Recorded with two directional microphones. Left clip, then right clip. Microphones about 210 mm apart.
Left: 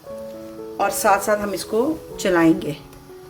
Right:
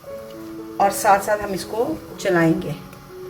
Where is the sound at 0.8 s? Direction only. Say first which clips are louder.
Right 2 dB; 40° left (ahead or behind).